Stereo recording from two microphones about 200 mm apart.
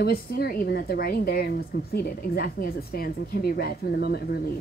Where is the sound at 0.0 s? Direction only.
50° left (ahead or behind).